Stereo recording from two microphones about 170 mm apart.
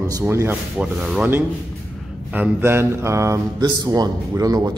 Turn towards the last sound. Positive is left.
turn(degrees=-20)  # may be behind; listen again after turning